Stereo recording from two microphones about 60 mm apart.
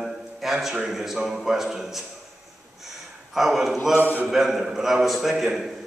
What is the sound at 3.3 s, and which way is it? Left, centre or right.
Speech, centre.